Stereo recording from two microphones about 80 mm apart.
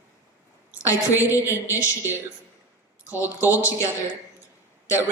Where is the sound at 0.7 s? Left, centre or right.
Left.